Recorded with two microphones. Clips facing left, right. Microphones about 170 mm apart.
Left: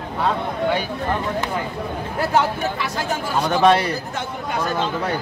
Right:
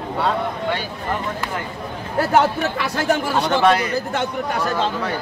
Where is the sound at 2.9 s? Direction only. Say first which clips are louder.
Right 5 dB; 70° right (ahead or behind).